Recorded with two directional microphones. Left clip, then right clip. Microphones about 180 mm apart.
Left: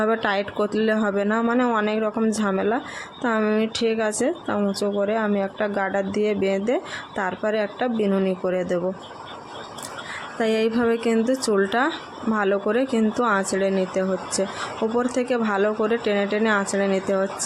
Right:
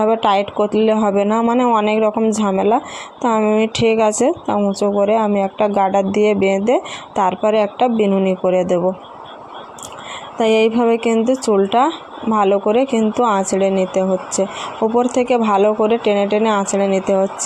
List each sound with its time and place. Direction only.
0.0 s speech: 15° right (ahead or behind)
10.3 s a woman's voice: 20° right (ahead or behind)